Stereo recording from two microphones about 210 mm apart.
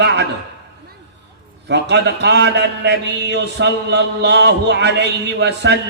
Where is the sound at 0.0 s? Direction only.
55° right (ahead or behind).